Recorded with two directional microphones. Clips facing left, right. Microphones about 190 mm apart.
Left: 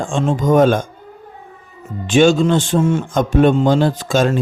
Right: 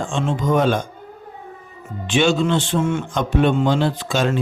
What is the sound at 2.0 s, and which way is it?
A man's voice, 45° left (ahead or behind).